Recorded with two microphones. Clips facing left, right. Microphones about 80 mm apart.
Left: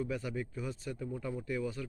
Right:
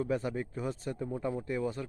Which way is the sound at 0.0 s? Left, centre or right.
Right.